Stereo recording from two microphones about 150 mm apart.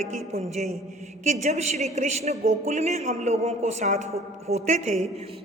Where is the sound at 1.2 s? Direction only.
50° right (ahead or behind).